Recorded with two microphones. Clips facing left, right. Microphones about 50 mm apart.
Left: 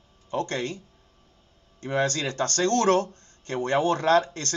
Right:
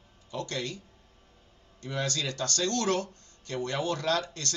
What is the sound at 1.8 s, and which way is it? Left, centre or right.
Speech, left.